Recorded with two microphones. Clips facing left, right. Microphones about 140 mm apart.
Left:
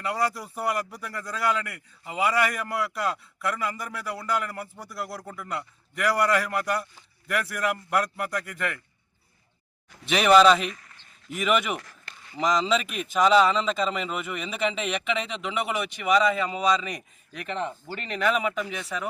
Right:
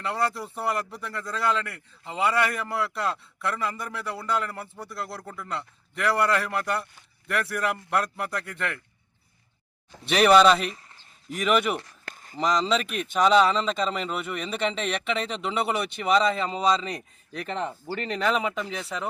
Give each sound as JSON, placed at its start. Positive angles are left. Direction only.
{"t": 0.0, "sound": "a man's voice", "side_deg": 0}
{"t": 10.0, "sound": "a man's voice", "side_deg": 0}
{"t": 10.8, "sound": "a sound", "side_deg": -30}
{"t": 11.3, "sound": "a man's voice", "side_deg": 0}
{"t": 12.0, "sound": "a sound", "side_deg": -45}
{"t": 12.4, "sound": "a man's voice", "side_deg": 5}
{"t": 15.3, "sound": "speech", "side_deg": -35}
{"t": 18.7, "sound": "speech", "side_deg": -30}